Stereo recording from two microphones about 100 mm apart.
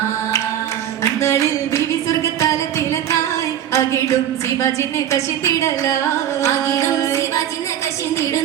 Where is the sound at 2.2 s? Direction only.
30° left (ahead or behind).